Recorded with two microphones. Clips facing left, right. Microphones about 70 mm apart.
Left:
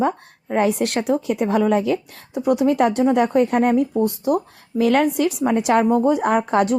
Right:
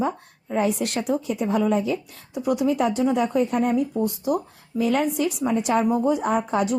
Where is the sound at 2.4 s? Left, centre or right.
Left.